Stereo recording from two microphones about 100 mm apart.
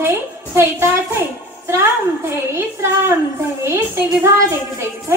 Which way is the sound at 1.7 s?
25° right (ahead or behind).